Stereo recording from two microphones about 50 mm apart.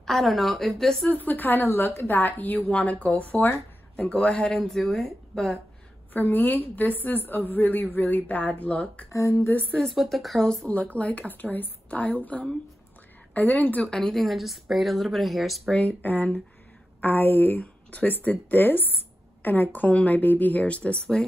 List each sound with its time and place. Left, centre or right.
0.0 s a woman's voice: centre
1.1 s a woman's voice: left
2.7 s a woman's voice: left
3.9 s speech: left
4.6 s a woman's voice: centre
6.1 s a woman's voice: left
9.1 s speech: left
9.8 s a woman's voice: centre
10.7 s a woman's voice: left
13.3 s a woman's voice: left
13.8 s a woman's voice: centre
15.7 s speech: centre
16.0 s a woman's voice: left; by 21.3 s centre